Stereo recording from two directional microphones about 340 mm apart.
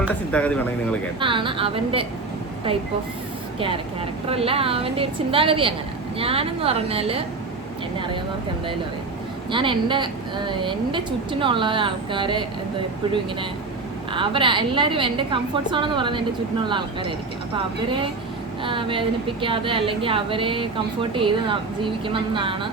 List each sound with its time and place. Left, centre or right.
0.0 s speech: centre
1.2 s a woman's voice: centre
4.3 s a woman's voice: centre
9.5 s a woman's voice: centre
14.1 s a woman's voice: centre
18.6 s a woman's voice: centre